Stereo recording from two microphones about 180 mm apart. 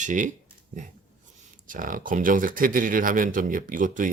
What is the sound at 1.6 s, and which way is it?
Speech, 50° right (ahead or behind).